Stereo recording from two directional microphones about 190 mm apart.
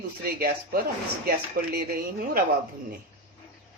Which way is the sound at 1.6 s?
50° right (ahead or behind).